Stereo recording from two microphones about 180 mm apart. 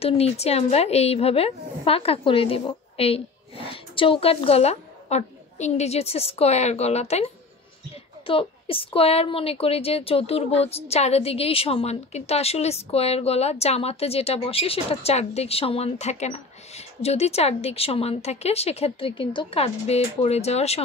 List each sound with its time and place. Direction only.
0.0 s a woman's voice: 35° left (ahead or behind)
8.3 s a woman's voice: 30° left (ahead or behind)